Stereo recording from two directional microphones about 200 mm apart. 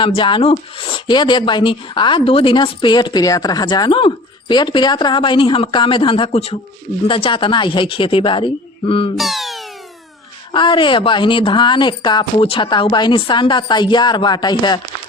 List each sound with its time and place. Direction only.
0.0 s speech: 25° left (ahead or behind)
9.1 s a sound: centre (ahead or behind)
10.5 s speech: 25° left (ahead or behind)